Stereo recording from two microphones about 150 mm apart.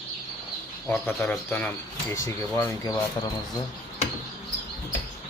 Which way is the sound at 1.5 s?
10° left (ahead or behind).